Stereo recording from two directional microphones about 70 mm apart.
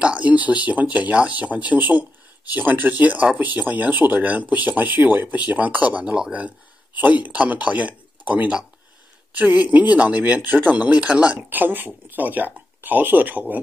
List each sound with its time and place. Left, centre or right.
0.0 s speech: centre
11.5 s speech: right